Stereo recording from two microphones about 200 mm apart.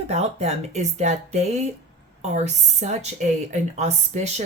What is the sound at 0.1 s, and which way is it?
A woman's voice, 30° right (ahead or behind).